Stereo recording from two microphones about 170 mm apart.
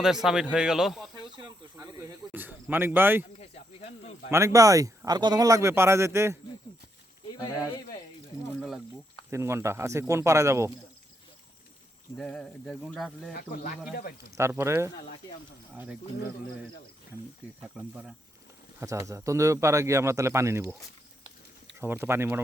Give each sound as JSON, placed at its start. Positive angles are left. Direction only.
{"t": 0.0, "sound": "speech", "side_deg": -5}
{"t": 1.2, "sound": "snake", "side_deg": -25}
{"t": 1.7, "sound": "a sound", "side_deg": -20}
{"t": 3.4, "sound": "snake", "side_deg": 40}
{"t": 4.3, "sound": "speech", "side_deg": -15}
{"t": 8.5, "sound": "snake", "side_deg": 0}
{"t": 9.3, "sound": "speech", "side_deg": -15}
{"t": 12.1, "sound": "speech", "side_deg": 5}
{"t": 13.3, "sound": "speech", "side_deg": 60}
{"t": 14.3, "sound": "speech", "side_deg": -15}
{"t": 17.7, "sound": "speech", "side_deg": -5}
{"t": 18.8, "sound": "speech", "side_deg": -15}
{"t": 21.8, "sound": "speech", "side_deg": -15}